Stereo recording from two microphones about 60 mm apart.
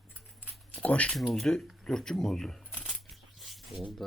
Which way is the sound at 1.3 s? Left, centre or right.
Centre.